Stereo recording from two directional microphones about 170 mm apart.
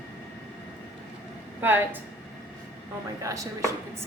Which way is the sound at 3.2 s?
20° right (ahead or behind).